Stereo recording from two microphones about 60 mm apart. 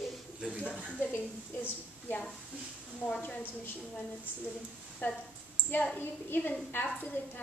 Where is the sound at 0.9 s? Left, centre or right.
Left.